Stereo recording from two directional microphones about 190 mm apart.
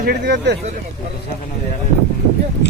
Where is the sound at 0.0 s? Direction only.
60° right (ahead or behind).